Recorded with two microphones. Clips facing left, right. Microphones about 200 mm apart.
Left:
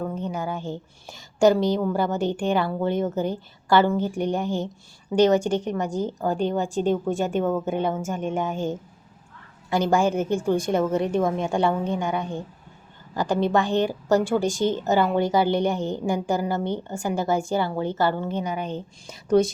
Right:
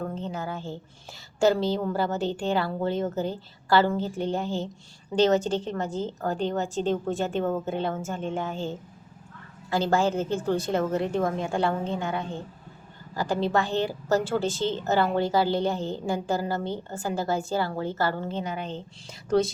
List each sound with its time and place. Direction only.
0.1 s a woman's voice: 15° left (ahead or behind)